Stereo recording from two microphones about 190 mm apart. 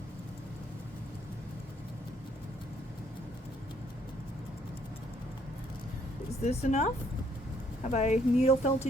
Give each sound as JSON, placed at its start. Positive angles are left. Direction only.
{"t": 6.4, "sound": "speech", "side_deg": 35}
{"t": 7.9, "sound": "speech", "side_deg": 35}